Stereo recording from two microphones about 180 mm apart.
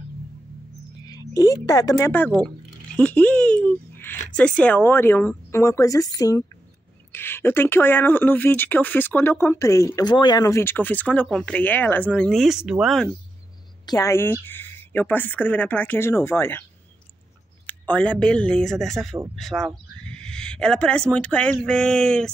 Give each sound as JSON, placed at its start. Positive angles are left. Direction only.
{"t": 1.0, "sound": "speech", "side_deg": 20}
{"t": 13.8, "sound": "speech", "side_deg": 20}
{"t": 17.6, "sound": "a sound", "side_deg": 10}
{"t": 18.2, "sound": "speech", "side_deg": 5}